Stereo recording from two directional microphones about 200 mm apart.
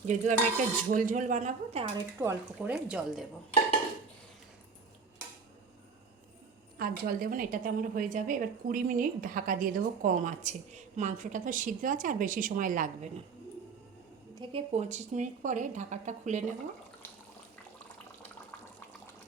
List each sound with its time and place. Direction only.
0.0 s a woman's voice: 35° right (ahead or behind)
2.1 s speech: 10° right (ahead or behind)
6.7 s a woman's voice: 45° right (ahead or behind)
14.3 s a woman's voice: 30° right (ahead or behind)